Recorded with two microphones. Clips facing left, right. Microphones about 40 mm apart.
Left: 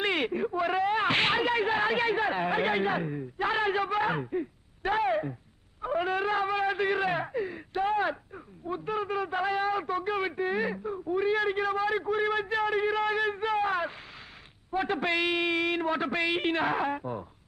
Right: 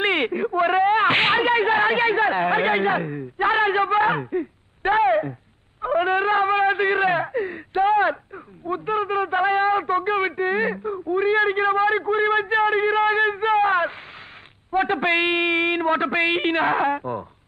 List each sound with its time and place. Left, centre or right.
0.0 s a sound: right
5.8 s wind instrument: right
8.6 s a man's voice: right